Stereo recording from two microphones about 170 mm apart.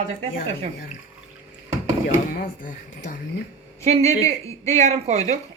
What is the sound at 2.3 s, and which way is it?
Speech, 55° left (ahead or behind).